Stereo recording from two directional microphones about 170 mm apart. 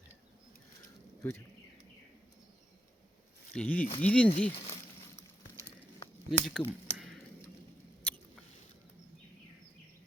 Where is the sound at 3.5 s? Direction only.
10° left (ahead or behind).